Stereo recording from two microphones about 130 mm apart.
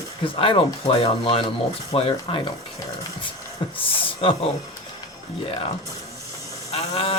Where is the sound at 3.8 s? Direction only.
45° left (ahead or behind).